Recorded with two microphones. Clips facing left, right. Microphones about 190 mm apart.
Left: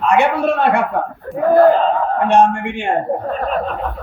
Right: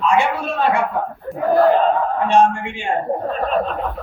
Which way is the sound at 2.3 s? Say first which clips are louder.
Left 2 dB; 60° left (ahead or behind).